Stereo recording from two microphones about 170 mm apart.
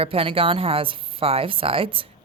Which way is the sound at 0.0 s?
35° right (ahead or behind).